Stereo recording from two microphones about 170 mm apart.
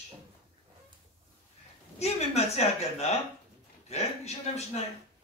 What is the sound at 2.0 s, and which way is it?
A woman's voice, 40° left (ahead or behind).